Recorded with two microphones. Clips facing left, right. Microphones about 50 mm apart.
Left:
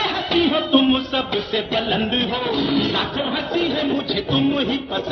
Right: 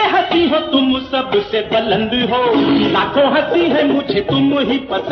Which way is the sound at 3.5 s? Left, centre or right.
Right.